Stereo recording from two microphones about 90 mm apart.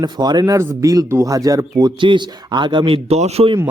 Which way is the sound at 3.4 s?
90° right.